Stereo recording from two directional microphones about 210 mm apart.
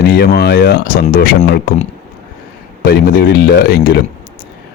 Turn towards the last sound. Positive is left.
turn(degrees=45)  # may be behind; listen again after turning